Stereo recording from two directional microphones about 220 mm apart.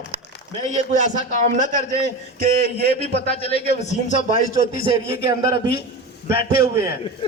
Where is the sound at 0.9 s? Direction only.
35° right (ahead or behind).